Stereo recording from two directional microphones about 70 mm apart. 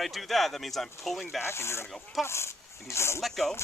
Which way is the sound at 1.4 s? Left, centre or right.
Left.